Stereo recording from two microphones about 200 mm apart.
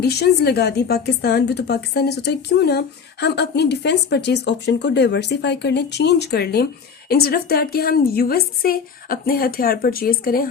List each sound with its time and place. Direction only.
0.0 s a woman's voice: 55° left (ahead or behind)